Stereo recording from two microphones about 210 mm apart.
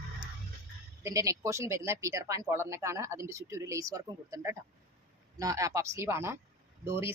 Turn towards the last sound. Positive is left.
turn(degrees=-10)  # may be behind; listen again after turning